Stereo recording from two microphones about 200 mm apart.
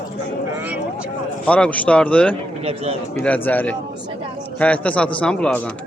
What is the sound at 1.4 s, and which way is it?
Speech, 5° left (ahead or behind).